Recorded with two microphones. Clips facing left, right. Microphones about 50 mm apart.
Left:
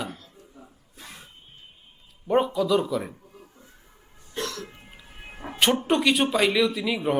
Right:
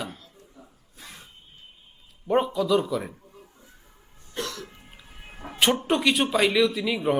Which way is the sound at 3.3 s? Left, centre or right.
Centre.